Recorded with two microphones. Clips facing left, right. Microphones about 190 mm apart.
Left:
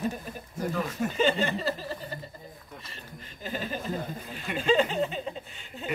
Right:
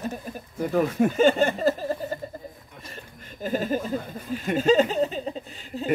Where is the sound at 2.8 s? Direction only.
45° right (ahead or behind).